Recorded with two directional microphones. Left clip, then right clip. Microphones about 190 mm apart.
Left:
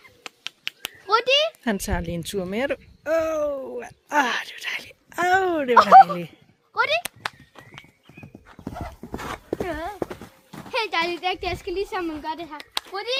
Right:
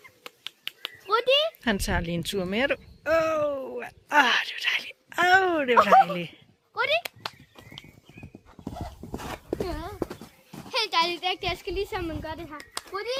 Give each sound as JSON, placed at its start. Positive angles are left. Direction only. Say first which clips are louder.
{"t": 0.2, "sound": "finger snapping", "louder": "left 5 dB", "side_deg": 45}
{"t": 1.6, "sound": "speech", "louder": "even", "side_deg": 15}
{"t": 5.7, "sound": "a child's voice", "louder": "left 7 dB", "side_deg": 50}
{"t": 7.2, "sound": "horse", "louder": "left 5 dB", "side_deg": 15}
{"t": 8.4, "sound": "dog", "louder": "left 4 dB", "side_deg": 5}
{"t": 9.1, "sound": "a sound", "louder": "left 3 dB", "side_deg": -25}
{"t": 9.6, "sound": "speech", "louder": "left 5 dB", "side_deg": 20}
{"t": 10.7, "sound": "speech", "louder": "left 1 dB", "side_deg": 40}